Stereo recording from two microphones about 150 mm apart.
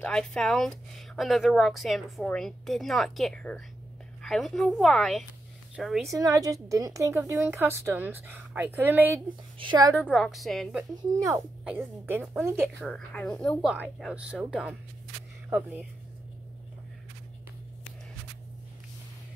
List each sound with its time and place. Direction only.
0.0 s speech: 5° left (ahead or behind)
6.0 s speech: 25° right (ahead or behind)
9.6 s a woman's voice: 30° right (ahead or behind)
10.1 s speech: centre (ahead or behind); by 12.8 s 15° right (ahead or behind)
12.8 s speech: 5° left (ahead or behind)
13.7 s speech: 5° right (ahead or behind)